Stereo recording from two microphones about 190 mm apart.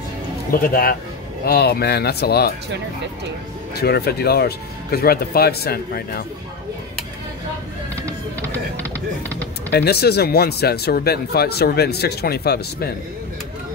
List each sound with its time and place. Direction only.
0.5 s speech: 45° left (ahead or behind)
3.7 s speech: 55° left (ahead or behind)
7.9 s music: 10° left (ahead or behind)
9.7 s speech: 60° left (ahead or behind)